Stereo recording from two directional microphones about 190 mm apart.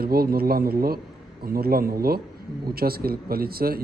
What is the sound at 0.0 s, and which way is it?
Speech, 55° right (ahead or behind).